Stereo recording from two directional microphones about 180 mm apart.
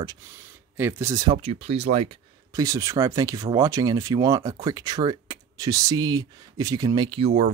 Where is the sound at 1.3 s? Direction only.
35° right (ahead or behind).